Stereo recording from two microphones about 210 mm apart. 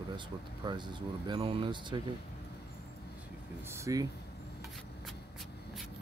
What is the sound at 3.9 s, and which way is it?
Speech, 15° right (ahead or behind).